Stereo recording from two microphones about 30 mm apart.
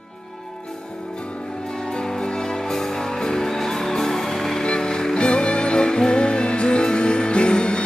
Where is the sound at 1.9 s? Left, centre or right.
Left.